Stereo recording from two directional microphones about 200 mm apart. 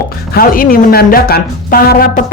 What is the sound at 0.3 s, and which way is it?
A woman's voice, 45° left (ahead or behind).